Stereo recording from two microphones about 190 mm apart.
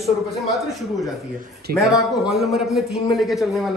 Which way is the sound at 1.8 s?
Centre (ahead or behind).